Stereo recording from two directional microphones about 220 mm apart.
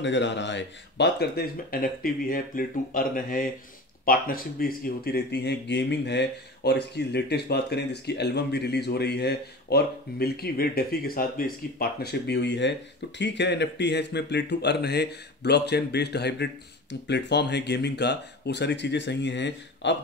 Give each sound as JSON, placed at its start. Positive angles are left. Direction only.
{"t": 0.0, "sound": "speech", "side_deg": 55}